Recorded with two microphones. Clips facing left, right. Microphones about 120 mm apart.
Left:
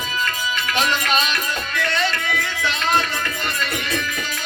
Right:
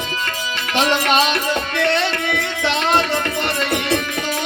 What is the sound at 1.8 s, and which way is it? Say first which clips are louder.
Music: right 3 dB; 70° right (ahead or behind).